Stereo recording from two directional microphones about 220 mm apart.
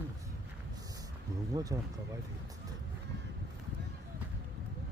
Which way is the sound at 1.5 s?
15° right (ahead or behind).